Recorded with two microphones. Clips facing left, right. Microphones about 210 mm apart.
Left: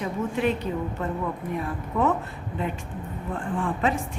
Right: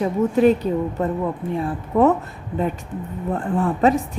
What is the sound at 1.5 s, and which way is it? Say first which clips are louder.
Speech: right 9 dB; 30° right (ahead or behind).